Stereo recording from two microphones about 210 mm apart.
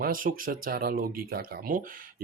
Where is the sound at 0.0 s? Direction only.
40° right (ahead or behind).